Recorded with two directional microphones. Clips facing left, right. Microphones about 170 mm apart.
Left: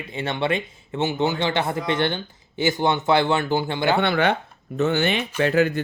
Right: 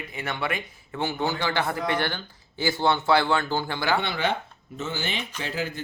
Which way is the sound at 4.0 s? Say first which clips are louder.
Left 7 dB; 60° left (ahead or behind).